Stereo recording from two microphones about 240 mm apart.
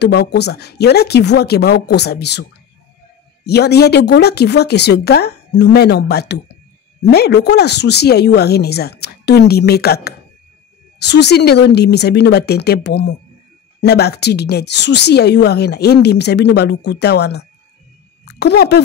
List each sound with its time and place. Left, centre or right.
0.0 s a woman's voice: left
3.4 s a woman's voice: left